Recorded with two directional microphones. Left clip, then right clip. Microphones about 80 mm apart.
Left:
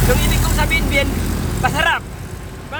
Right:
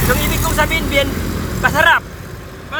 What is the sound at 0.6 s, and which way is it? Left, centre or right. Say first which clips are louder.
Speech: right 2 dB; left.